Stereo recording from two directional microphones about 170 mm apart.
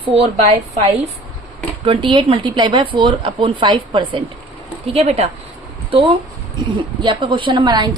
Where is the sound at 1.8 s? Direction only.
30° right (ahead or behind).